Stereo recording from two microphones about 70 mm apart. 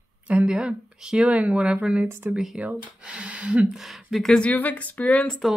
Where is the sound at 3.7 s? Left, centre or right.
Centre.